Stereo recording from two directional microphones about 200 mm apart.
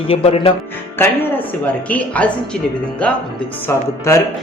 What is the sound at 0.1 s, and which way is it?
Speech, 30° left (ahead or behind).